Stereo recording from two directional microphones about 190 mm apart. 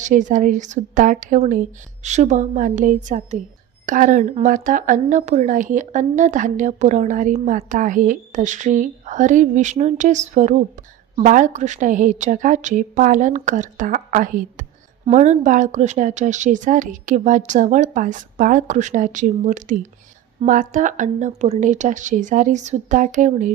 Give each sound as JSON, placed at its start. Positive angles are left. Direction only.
{"t": 0.0, "sound": "a woman's voice", "side_deg": -40}